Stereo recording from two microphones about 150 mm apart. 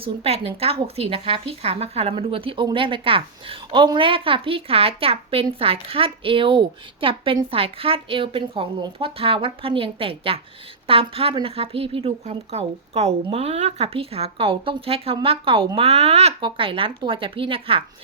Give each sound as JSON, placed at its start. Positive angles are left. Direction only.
{"t": 0.0, "sound": "speech", "side_deg": -40}